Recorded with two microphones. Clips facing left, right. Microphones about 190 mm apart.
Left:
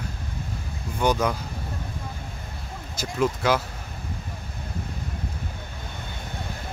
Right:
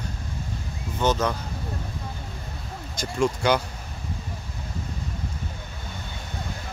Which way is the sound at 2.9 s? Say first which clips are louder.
Even; 5° left (ahead or behind).